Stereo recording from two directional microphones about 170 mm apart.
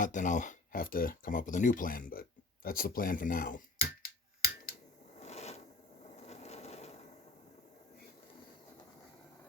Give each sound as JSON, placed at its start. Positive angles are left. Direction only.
{"t": 0.0, "sound": "speech", "side_deg": 45}
{"t": 2.6, "sound": "finger snapping", "side_deg": 60}
{"t": 5.2, "sound": "a sound", "side_deg": 40}
{"t": 6.1, "sound": "wood", "side_deg": 40}